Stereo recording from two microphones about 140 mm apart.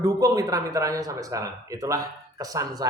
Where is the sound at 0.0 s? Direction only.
25° right (ahead or behind).